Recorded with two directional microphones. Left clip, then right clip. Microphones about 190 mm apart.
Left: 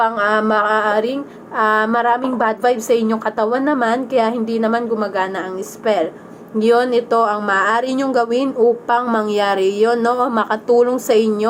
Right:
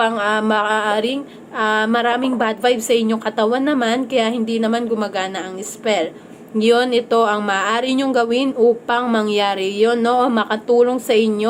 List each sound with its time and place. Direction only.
0.0 s a woman's voice: 5° right (ahead or behind)
6.7 s a woman's voice: centre (ahead or behind)